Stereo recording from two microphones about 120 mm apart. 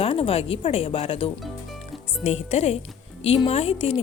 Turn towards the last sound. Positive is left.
turn(degrees=55)  # may be behind; listen again after turning